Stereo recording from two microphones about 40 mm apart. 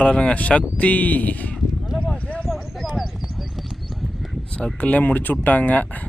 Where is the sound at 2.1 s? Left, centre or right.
Left.